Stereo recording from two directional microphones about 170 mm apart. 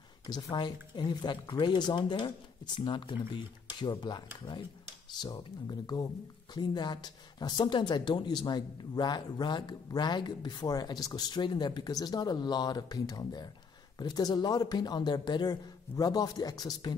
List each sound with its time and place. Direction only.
0.3 s speech: 25° left (ahead or behind)